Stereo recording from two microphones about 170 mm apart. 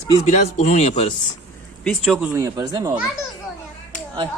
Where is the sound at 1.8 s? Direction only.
Centre (ahead or behind).